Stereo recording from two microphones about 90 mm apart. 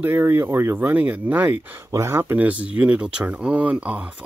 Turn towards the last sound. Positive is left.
turn(degrees=-15)  # may be behind; listen again after turning